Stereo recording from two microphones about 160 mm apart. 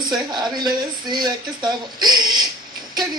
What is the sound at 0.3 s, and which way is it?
Speech, 25° right (ahead or behind).